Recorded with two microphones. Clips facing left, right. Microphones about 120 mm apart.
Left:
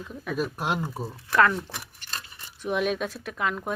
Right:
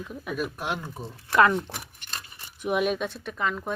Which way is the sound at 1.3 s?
20° right (ahead or behind).